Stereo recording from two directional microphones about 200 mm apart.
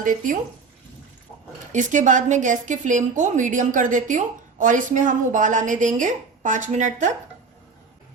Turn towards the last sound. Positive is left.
turn(degrees=-40)  # may be behind; listen again after turning